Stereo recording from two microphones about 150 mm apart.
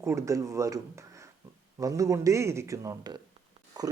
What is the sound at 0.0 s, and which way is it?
Speech, 20° right (ahead or behind).